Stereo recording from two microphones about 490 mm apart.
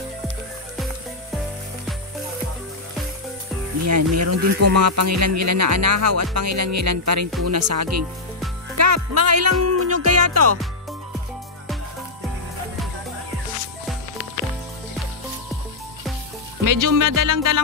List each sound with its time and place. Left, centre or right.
3.8 s speech: right
16.6 s speech: right